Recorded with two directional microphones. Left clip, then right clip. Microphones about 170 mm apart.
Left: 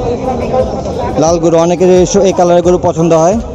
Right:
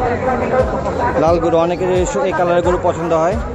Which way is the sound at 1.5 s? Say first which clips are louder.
Left 7 dB; 15° left (ahead or behind).